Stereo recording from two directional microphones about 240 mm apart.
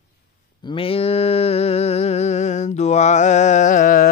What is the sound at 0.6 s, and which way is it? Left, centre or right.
Mantra, left.